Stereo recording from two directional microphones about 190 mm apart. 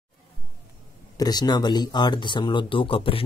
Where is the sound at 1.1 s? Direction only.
20° left (ahead or behind).